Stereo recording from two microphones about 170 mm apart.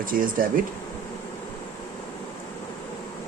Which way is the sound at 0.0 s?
55° right (ahead or behind).